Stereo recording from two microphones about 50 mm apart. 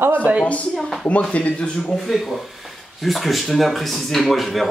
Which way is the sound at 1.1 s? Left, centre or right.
Left.